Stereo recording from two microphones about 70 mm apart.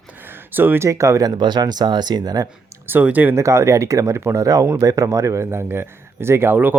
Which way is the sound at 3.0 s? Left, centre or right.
Right.